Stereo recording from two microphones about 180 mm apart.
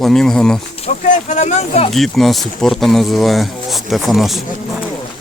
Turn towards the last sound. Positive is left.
turn(degrees=0)  # may be behind; listen again after turning